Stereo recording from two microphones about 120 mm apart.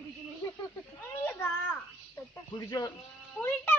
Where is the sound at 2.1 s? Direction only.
30° left (ahead or behind).